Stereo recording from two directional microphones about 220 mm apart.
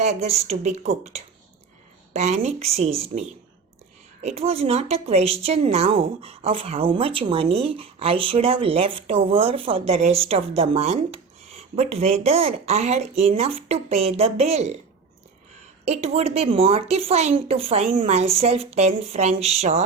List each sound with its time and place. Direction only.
0.0 s a woman's voice: 30° right (ahead or behind)
15.8 s a woman's voice: 30° right (ahead or behind)